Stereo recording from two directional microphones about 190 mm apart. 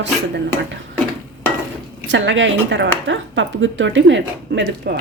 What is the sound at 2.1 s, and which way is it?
Speech, 75° right (ahead or behind).